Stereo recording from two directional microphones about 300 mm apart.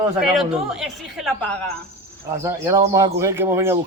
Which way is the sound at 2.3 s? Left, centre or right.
Centre.